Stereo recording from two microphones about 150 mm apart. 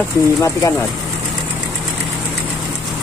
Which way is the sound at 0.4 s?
20° left (ahead or behind).